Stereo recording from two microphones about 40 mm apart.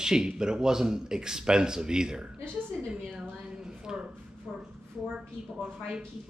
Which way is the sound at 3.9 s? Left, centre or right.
Centre.